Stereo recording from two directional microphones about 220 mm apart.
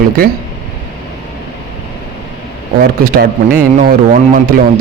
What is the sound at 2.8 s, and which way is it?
A man's voice, 45° right (ahead or behind).